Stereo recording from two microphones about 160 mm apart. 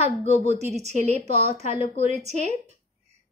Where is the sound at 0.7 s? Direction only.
45° right (ahead or behind).